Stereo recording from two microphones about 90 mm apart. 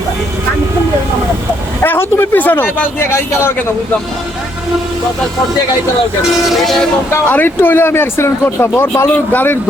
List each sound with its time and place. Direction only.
1.8 s speech: 25° left (ahead or behind)
6.5 s speech: centre (ahead or behind)
7.3 s speech: 20° left (ahead or behind)